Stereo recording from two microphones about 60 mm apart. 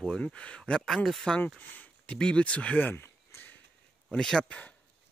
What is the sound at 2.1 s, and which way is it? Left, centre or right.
Speech, centre.